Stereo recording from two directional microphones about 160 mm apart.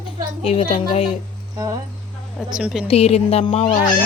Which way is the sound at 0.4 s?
35° left (ahead or behind).